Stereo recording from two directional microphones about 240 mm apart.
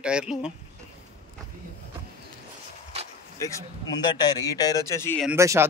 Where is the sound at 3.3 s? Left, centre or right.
Centre.